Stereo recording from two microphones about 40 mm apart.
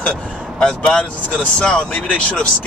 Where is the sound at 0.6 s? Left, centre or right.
Left.